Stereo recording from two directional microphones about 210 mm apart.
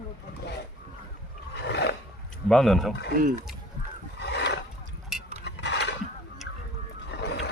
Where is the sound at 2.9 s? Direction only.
55° left (ahead or behind).